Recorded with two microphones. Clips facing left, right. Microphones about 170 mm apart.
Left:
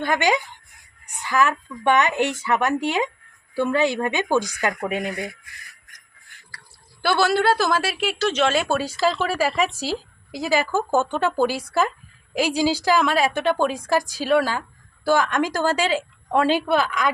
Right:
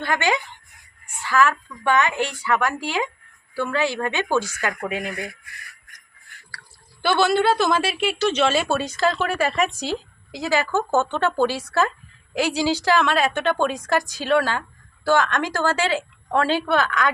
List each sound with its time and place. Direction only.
0.0 s a woman's voice: 15° left (ahead or behind)
7.0 s a woman's voice: 5° left (ahead or behind)